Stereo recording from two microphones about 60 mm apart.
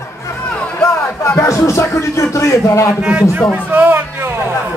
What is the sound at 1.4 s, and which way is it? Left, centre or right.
Speech, left.